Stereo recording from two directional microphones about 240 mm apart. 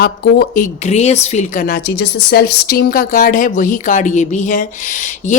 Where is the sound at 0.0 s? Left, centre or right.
Left.